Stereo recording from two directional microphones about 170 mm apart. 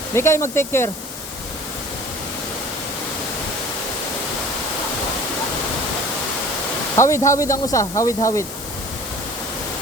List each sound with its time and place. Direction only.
0.1 s speech: 15° left (ahead or behind)
6.9 s speech: 15° left (ahead or behind)